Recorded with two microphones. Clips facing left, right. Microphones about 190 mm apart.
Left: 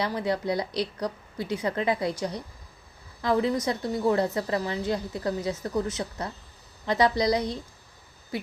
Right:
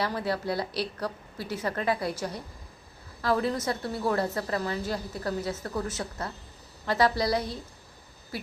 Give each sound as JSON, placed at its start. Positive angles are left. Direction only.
{"t": 0.0, "sound": "a woman's voice", "side_deg": 15}